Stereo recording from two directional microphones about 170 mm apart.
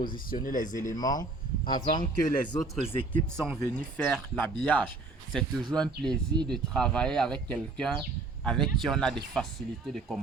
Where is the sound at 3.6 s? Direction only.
5° left (ahead or behind).